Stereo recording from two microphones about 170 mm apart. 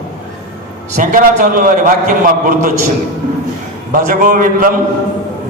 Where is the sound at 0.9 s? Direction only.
50° right (ahead or behind).